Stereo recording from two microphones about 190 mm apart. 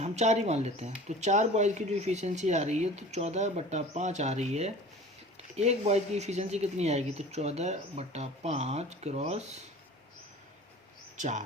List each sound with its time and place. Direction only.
0.0 s speech: 35° right (ahead or behind)
11.2 s speech: 40° right (ahead or behind)